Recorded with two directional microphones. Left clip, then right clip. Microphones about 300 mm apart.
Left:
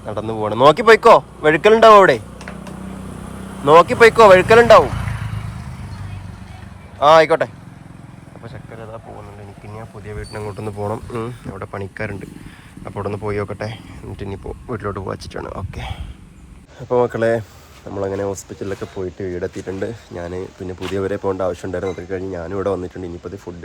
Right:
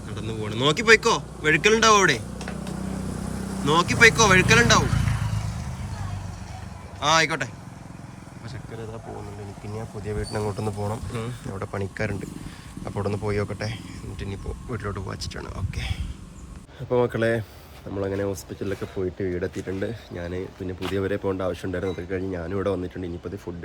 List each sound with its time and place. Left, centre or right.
0.1 s speech: centre
3.2 s vehicle: left
3.7 s speech: centre
5.2 s vehicle: centre
7.0 s speech: centre
9.7 s speech: centre